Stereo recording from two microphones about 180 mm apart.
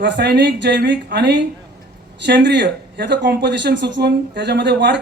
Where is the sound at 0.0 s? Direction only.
70° right (ahead or behind).